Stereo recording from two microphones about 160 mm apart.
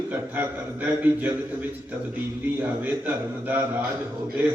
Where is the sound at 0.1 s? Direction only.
10° right (ahead or behind).